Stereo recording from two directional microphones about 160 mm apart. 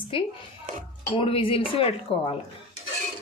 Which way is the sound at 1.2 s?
35° left (ahead or behind).